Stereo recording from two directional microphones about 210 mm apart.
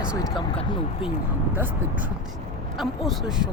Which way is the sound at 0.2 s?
20° left (ahead or behind).